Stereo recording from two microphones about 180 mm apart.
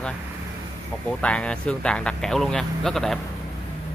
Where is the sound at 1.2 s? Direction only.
5° left (ahead or behind).